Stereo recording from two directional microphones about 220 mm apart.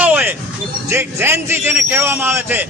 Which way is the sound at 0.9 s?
10° right (ahead or behind).